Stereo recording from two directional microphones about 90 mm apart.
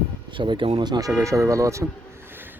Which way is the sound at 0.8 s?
50° right (ahead or behind).